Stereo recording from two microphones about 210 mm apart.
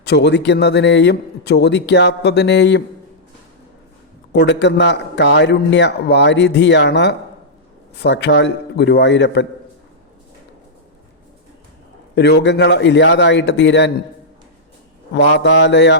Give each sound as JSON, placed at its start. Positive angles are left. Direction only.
{"t": 0.0, "sound": "a man's voice", "side_deg": 55}
{"t": 4.3, "sound": "a man's voice", "side_deg": 55}
{"t": 12.1, "sound": "a man's voice", "side_deg": 55}
{"t": 15.1, "sound": "a man's voice", "side_deg": 55}